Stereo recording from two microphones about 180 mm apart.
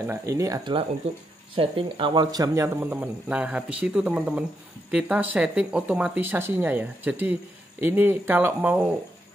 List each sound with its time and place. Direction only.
0.0 s a man's voice: 15° right (ahead or behind)
1.5 s a man's voice: 30° right (ahead or behind); by 8.8 s 10° right (ahead or behind)